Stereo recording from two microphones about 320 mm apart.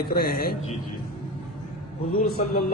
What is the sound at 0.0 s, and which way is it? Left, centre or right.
Speech, left.